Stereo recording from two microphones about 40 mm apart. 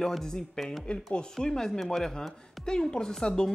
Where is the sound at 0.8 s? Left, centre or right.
Left.